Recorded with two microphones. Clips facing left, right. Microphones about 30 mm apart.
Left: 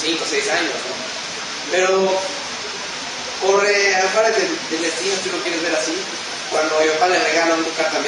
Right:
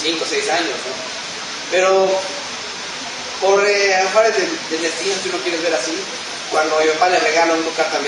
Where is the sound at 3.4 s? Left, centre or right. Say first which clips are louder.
Right 2 dB; right.